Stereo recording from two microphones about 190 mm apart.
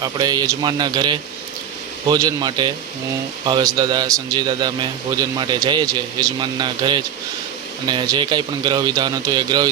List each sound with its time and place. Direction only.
0.0 s a man's voice: 20° right (ahead or behind)